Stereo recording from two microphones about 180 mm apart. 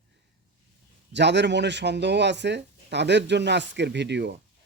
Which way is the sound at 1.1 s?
75° right (ahead or behind).